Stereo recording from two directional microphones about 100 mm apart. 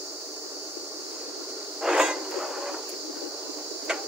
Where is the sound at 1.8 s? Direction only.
5° right (ahead or behind).